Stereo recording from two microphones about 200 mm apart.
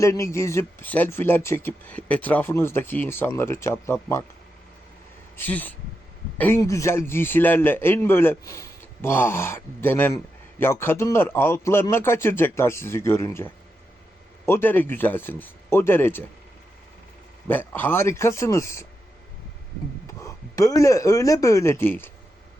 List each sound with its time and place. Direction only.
0.0 s speech: 15° left (ahead or behind)
5.4 s speech: 10° left (ahead or behind)
17.5 s speech: 10° left (ahead or behind)
20.1 s speech: 15° left (ahead or behind)